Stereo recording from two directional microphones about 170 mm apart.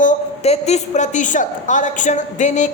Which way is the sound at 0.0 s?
45° left (ahead or behind).